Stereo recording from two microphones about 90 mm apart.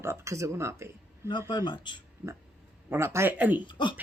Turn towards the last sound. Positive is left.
turn(degrees=60)  # may be behind; listen again after turning